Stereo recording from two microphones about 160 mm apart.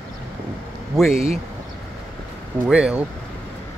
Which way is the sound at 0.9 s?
Centre (ahead or behind).